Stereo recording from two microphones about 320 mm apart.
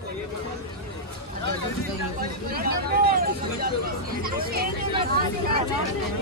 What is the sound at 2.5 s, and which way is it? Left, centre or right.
Hubbub, right.